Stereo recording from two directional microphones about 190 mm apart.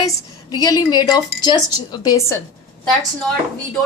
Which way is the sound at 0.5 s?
20° left (ahead or behind).